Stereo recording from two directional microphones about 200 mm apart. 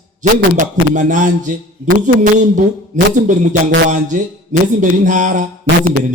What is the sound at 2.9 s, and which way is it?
Mantra, 40° right (ahead or behind).